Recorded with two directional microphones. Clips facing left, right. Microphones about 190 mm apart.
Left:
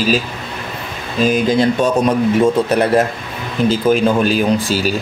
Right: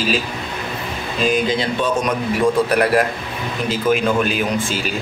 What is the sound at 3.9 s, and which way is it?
Speech, 35° left (ahead or behind).